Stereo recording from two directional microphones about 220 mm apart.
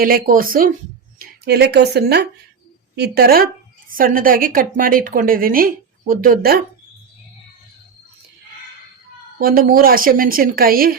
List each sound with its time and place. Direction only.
0.0 s a woman's voice: 40° right (ahead or behind)
9.4 s a woman's voice: 40° right (ahead or behind)